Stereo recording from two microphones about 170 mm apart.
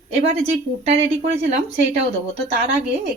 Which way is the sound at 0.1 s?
35° right (ahead or behind).